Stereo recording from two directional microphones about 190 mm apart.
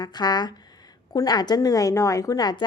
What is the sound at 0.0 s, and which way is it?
A woman's voice, 20° left (ahead or behind).